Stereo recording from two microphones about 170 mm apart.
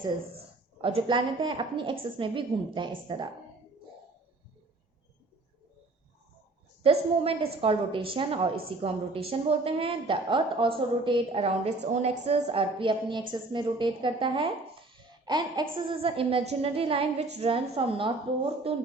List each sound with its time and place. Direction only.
0.8 s a woman's voice: 30° right (ahead or behind)
6.8 s a woman's voice: 35° right (ahead or behind)